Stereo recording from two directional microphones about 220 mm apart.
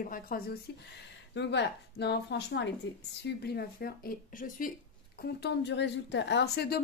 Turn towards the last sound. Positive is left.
turn(degrees=45)  # may be behind; listen again after turning